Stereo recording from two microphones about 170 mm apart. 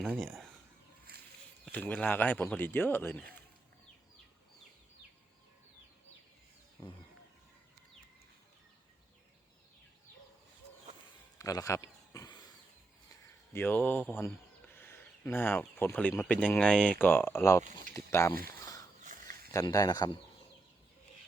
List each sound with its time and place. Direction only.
0.0 s speech: centre (ahead or behind)
1.6 s speech: 10° left (ahead or behind)
6.8 s speech: 15° left (ahead or behind)
11.3 s a sound: 20° left (ahead or behind)
13.5 s speech: 10° left (ahead or behind)
17.6 s speech: 50° right (ahead or behind)
17.9 s speech: 15° left (ahead or behind)
18.4 s a sound: 20° left (ahead or behind)
19.5 s speech: 20° left (ahead or behind)